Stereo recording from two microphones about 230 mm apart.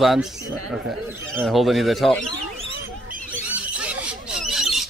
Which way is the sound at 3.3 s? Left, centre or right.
Centre.